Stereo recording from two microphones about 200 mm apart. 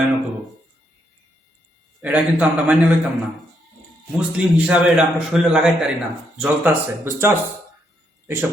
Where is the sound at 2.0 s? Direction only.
5° right (ahead or behind).